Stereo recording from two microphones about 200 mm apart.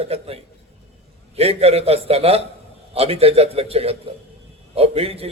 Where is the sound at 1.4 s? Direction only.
30° right (ahead or behind).